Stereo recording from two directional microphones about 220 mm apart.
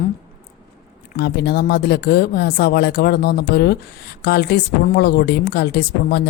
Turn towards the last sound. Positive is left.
turn(degrees=50)  # may be behind; listen again after turning